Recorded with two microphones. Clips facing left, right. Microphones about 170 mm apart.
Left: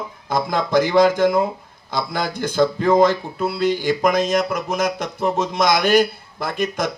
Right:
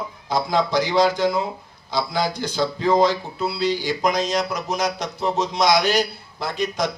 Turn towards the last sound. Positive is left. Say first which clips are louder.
# left 1 dB
turn(degrees=50)  # may be behind; listen again after turning